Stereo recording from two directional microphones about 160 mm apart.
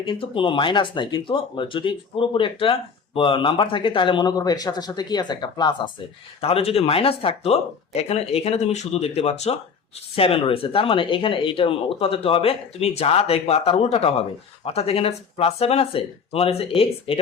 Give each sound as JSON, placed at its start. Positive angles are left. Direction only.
{"t": 0.0, "sound": "speech", "side_deg": 30}
{"t": 6.4, "sound": "speech", "side_deg": 40}